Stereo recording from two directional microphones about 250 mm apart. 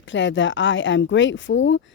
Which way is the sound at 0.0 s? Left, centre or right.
Left.